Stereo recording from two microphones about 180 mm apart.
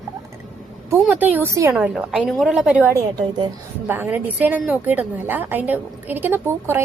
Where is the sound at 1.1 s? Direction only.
10° right (ahead or behind).